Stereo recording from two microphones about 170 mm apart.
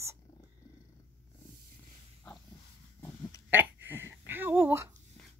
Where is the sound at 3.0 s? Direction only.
15° left (ahead or behind).